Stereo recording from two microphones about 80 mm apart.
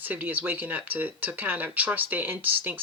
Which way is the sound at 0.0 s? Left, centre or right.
Right.